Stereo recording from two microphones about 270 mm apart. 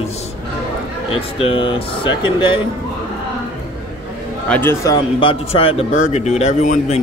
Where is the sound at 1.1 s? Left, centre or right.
Centre.